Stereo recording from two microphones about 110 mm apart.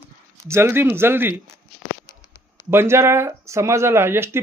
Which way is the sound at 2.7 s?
25° right (ahead or behind).